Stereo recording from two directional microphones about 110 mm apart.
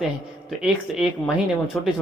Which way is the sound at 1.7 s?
5° left (ahead or behind).